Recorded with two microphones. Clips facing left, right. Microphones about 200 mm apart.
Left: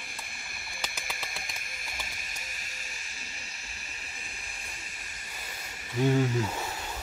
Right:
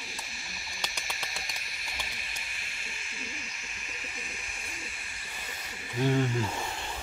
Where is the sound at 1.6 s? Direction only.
50° left (ahead or behind).